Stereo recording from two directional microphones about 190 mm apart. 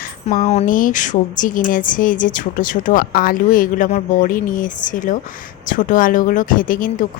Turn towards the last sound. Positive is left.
turn(degrees=45)  # may be behind; listen again after turning